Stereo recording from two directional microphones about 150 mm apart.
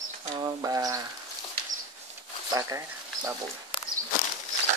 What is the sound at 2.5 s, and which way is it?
Speech, 20° right (ahead or behind).